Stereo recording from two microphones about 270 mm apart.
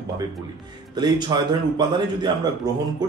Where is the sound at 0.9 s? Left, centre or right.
Centre.